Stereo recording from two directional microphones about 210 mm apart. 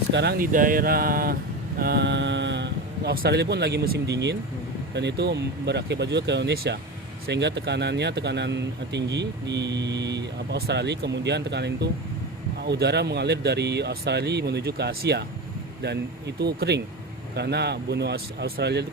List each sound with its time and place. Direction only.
0.1 s speech: 55° right (ahead or behind)